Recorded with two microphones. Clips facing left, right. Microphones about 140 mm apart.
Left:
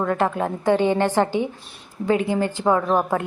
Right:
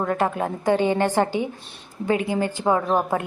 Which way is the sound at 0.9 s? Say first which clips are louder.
Left 1 dB; 45° right (ahead or behind).